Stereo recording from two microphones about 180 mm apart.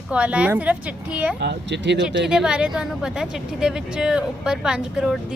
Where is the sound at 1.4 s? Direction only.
70° right (ahead or behind).